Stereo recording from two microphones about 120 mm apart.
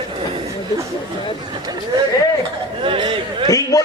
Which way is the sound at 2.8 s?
45° right (ahead or behind).